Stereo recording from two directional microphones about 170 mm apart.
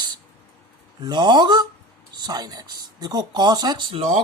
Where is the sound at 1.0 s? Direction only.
25° right (ahead or behind).